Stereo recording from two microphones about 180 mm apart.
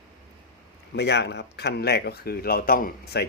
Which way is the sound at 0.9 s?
70° left (ahead or behind).